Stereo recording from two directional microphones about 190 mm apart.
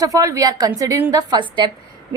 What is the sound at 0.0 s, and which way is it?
A woman's voice, 15° right (ahead or behind).